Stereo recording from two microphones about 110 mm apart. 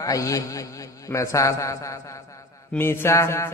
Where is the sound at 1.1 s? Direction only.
30° left (ahead or behind).